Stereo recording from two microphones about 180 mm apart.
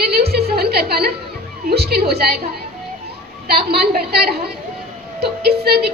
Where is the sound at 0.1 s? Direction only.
60° right (ahead or behind).